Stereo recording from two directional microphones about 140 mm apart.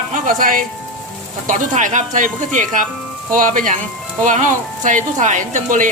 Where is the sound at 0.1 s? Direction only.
75° right (ahead or behind).